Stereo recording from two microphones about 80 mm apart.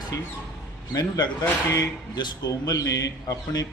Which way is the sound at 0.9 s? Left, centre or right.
Left.